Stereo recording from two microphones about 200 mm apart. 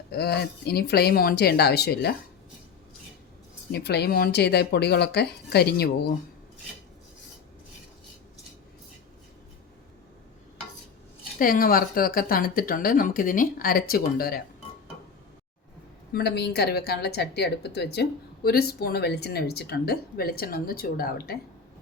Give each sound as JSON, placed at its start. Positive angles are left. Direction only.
{"t": 0.1, "sound": "a woman's voice", "side_deg": 55}
{"t": 3.7, "sound": "speech", "side_deg": 55}
{"t": 11.3, "sound": "a woman's voice", "side_deg": 45}
{"t": 16.1, "sound": "a woman's voice", "side_deg": 55}